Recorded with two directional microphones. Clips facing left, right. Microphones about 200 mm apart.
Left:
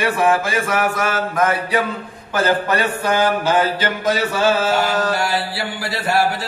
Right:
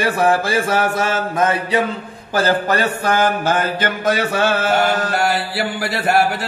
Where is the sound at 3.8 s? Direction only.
60° right (ahead or behind).